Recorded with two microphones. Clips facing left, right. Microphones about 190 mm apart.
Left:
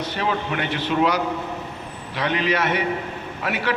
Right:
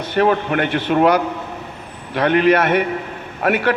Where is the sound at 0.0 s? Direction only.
55° right (ahead or behind).